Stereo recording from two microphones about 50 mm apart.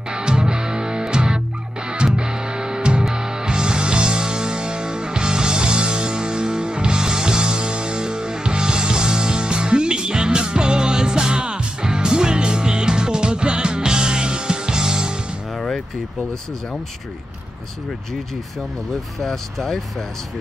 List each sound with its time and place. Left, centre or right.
0.1 s music: centre
15.5 s vehicle: centre
19.1 s speech: centre